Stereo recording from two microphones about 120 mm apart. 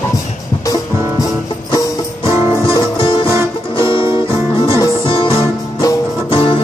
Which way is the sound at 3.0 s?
45° left (ahead or behind).